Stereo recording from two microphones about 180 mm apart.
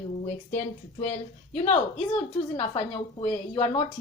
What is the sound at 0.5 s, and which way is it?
A woman's voice, 45° left (ahead or behind).